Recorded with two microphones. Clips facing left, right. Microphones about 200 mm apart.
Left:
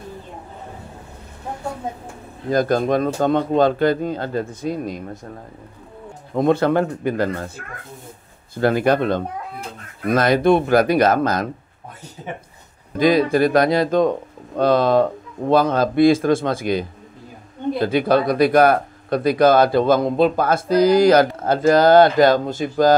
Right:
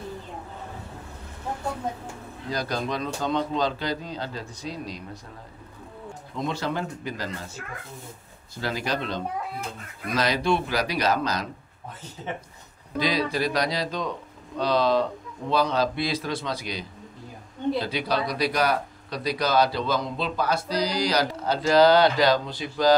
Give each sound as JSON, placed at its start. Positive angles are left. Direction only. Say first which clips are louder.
{"t": 2.5, "sound": "speech", "louder": "left 11 dB", "side_deg": 50}
{"t": 6.3, "sound": "speech", "louder": "left 12 dB", "side_deg": 55}
{"t": 12.9, "sound": "speech", "louder": "left 10 dB", "side_deg": 50}